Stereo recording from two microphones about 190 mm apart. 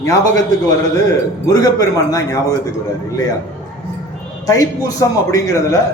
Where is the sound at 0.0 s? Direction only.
20° left (ahead or behind).